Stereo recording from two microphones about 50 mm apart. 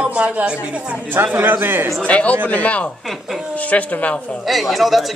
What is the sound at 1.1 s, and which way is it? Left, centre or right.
Speech, right.